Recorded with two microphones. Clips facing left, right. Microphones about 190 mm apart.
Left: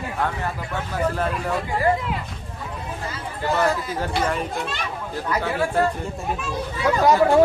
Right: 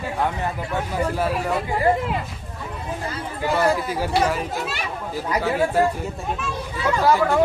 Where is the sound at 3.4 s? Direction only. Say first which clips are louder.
Right 1 dB; 10° right (ahead or behind).